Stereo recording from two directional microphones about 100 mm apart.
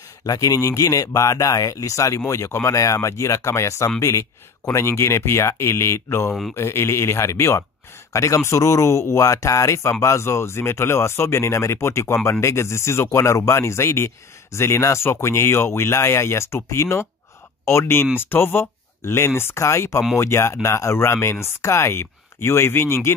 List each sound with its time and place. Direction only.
0.3 s speech: 35° left (ahead or behind)